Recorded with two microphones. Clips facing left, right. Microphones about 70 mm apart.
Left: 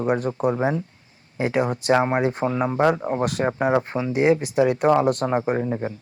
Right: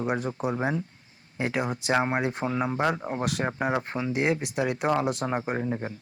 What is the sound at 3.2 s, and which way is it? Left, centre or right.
Speech, centre.